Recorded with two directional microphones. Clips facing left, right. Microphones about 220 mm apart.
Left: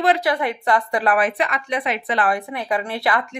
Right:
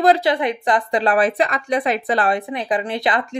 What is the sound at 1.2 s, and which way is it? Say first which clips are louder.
Speech: right 3 dB; 35° right (ahead or behind).